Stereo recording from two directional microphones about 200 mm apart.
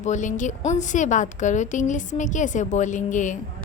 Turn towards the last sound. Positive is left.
turn(degrees=40)  # may be behind; listen again after turning